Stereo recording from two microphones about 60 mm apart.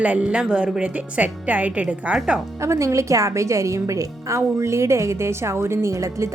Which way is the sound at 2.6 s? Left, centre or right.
Right.